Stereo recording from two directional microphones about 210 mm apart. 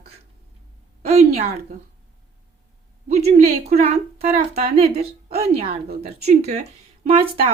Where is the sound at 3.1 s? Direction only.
30° right (ahead or behind).